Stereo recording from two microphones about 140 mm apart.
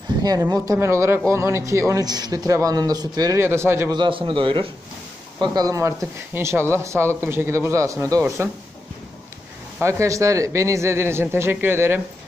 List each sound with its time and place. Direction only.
0.2 s a man's voice: 30° right (ahead or behind)
3.9 s a man's voice: 35° right (ahead or behind)
9.8 s a man's voice: 20° right (ahead or behind)